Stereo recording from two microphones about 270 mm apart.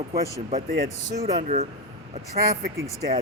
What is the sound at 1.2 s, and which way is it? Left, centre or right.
Speech, right.